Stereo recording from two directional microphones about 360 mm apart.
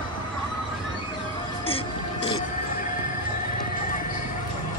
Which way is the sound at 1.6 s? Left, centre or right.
Centre.